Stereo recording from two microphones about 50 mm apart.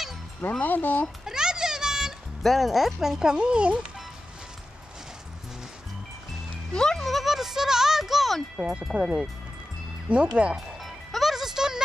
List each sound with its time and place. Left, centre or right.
0.5 s speech: left
1.2 s children playing: centre
2.4 s speech: centre; by 3.8 s right
6.7 s speech: centre
7.1 s music: centre
8.6 s speech: right
10.8 s music: centre